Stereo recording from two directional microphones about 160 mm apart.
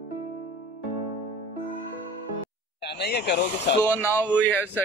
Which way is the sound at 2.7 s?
90° left.